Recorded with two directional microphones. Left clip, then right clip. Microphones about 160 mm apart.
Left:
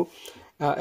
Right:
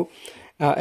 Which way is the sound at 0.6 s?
35° right (ahead or behind).